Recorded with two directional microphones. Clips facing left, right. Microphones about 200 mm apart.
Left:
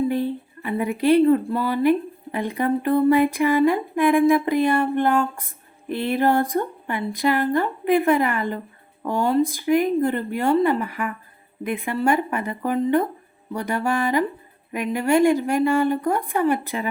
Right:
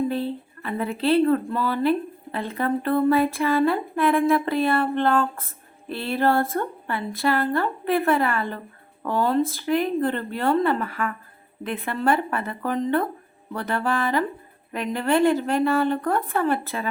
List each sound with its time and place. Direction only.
0.1 s a woman's voice: 15° left (ahead or behind)